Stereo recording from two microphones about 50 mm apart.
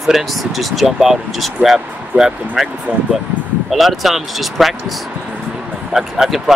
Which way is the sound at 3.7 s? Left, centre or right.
Centre.